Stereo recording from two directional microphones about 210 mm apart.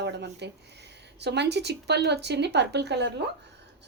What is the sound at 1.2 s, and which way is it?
A woman's voice, 55° right (ahead or behind).